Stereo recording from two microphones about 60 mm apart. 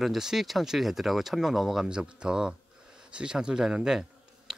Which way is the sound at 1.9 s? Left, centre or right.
Centre.